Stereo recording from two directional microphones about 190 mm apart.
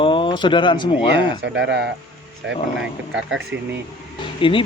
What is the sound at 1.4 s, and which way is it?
Speech, 70° right (ahead or behind).